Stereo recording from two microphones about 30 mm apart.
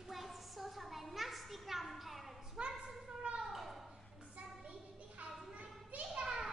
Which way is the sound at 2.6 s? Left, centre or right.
Right.